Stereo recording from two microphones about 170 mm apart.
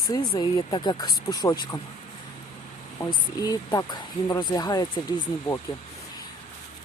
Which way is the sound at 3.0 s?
20° left (ahead or behind).